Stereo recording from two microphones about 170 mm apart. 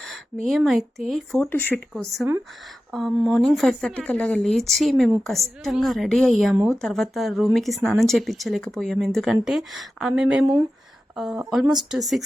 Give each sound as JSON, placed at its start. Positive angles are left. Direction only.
{"t": 0.4, "sound": "speech", "side_deg": 0}
{"t": 1.5, "sound": "speech", "side_deg": 10}
{"t": 1.9, "sound": "speech", "side_deg": 0}
{"t": 11.6, "sound": "speech", "side_deg": -25}
{"t": 11.9, "sound": "speech", "side_deg": 0}